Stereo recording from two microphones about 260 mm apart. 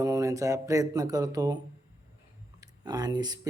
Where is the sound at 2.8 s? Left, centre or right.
Centre.